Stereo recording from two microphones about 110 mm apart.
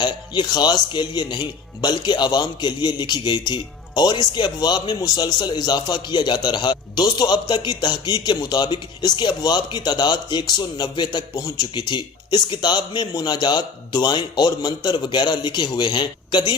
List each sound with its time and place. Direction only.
0.0 s a man's voice: 45° left (ahead or behind)